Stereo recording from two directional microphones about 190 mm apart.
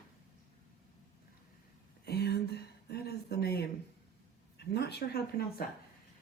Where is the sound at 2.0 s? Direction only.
60° left (ahead or behind).